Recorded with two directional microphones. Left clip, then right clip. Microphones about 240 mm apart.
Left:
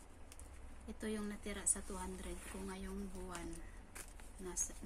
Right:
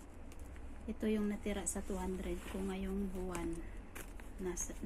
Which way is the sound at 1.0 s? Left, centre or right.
Centre.